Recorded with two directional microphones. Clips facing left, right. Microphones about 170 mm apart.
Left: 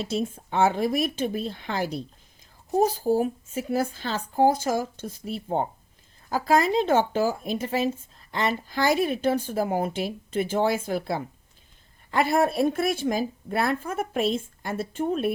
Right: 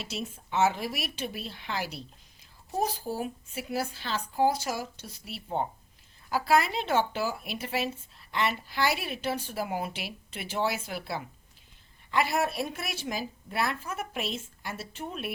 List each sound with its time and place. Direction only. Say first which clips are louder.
0.1 s a woman's voice: left 7 dB; 50° left (ahead or behind)